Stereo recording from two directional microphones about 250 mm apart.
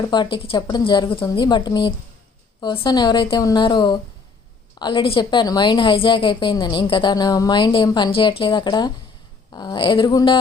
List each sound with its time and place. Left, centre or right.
0.1 s a woman's voice: centre